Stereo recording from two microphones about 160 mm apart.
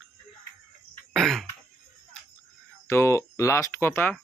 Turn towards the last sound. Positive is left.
turn(degrees=10)  # may be behind; listen again after turning